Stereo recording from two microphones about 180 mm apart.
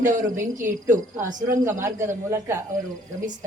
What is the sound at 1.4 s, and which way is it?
Speech, 15° right (ahead or behind).